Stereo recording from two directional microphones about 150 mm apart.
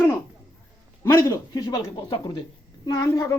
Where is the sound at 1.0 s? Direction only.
20° left (ahead or behind).